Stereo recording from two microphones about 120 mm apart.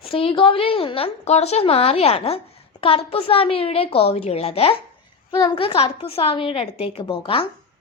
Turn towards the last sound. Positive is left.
turn(degrees=50)  # may be behind; listen again after turning